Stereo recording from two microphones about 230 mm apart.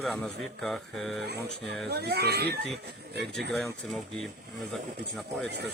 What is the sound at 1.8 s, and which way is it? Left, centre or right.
Speech, right.